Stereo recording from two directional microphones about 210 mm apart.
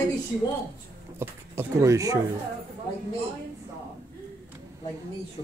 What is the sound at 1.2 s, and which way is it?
Speech, 15° right (ahead or behind).